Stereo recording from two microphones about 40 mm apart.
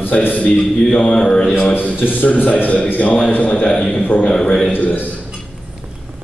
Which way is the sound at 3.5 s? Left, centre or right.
Left.